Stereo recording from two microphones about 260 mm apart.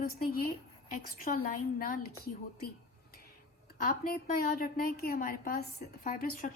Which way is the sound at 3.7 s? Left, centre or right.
Left.